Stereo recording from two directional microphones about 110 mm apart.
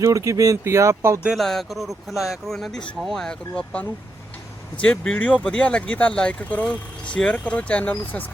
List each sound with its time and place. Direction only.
0.0 s speech: 30° right (ahead or behind)
1.4 s speech: 5° left (ahead or behind)